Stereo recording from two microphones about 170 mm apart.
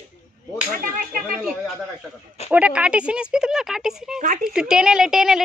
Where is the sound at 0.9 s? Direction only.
55° right (ahead or behind).